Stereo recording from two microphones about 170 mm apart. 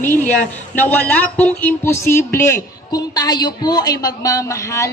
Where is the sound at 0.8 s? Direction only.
10° left (ahead or behind).